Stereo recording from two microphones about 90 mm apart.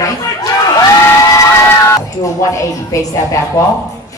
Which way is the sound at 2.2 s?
35° left (ahead or behind).